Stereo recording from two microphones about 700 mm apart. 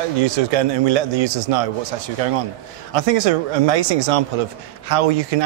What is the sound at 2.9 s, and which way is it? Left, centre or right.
Speech, right.